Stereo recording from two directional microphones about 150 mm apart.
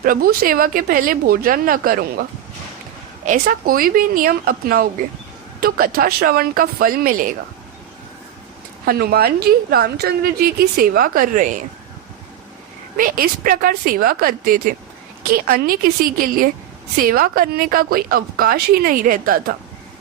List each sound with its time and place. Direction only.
0.0 s a woman's voice: 75° right (ahead or behind)
3.2 s a woman's voice: 70° right (ahead or behind)
8.9 s a woman's voice: 90° right; by 11.6 s 60° right (ahead or behind)
13.0 s a woman's voice: 70° right (ahead or behind)